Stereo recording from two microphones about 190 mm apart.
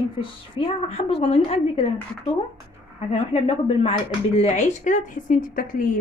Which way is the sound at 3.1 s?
30° left (ahead or behind).